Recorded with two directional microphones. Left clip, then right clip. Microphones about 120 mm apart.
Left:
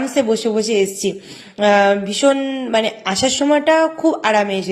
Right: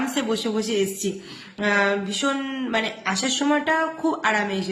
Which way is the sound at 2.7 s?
45° left (ahead or behind).